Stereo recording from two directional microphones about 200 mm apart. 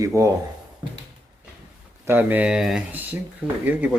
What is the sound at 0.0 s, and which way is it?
Speech, 15° right (ahead or behind).